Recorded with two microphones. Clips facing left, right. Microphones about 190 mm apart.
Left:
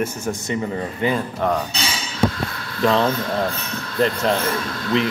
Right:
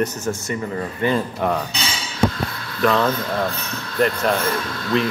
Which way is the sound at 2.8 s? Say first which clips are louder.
Even; 25° left (ahead or behind).